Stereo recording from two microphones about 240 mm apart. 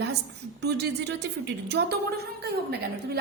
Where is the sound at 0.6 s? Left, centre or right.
Right.